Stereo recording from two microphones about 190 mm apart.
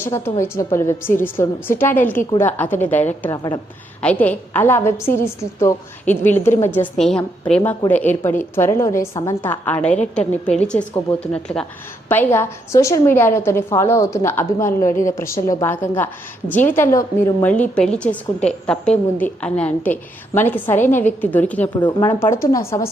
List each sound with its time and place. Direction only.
0.3 s a woman's voice: 15° left (ahead or behind)
4.0 s a woman's voice: 10° left (ahead or behind)
21.8 s a woman's voice: 25° left (ahead or behind)